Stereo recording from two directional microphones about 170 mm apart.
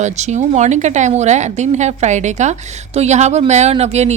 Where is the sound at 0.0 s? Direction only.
45° right (ahead or behind).